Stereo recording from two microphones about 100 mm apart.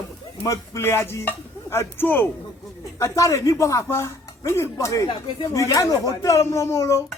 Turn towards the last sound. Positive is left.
turn(degrees=30)  # may be behind; listen again after turning